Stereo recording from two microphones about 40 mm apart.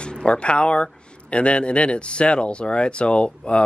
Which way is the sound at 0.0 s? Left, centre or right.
Left.